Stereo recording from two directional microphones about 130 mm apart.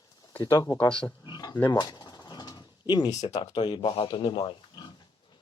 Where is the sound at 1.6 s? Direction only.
30° left (ahead or behind).